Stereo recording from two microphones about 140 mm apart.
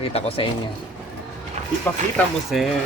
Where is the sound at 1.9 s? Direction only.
15° left (ahead or behind).